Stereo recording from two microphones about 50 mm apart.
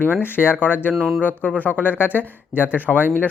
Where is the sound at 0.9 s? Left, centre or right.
Centre.